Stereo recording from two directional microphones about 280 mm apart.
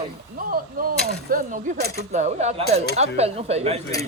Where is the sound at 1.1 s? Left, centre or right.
Right.